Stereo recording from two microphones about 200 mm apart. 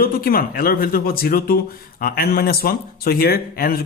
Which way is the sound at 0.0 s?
45° left (ahead or behind).